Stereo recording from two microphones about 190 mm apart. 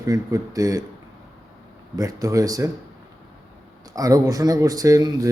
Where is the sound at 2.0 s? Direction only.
20° right (ahead or behind).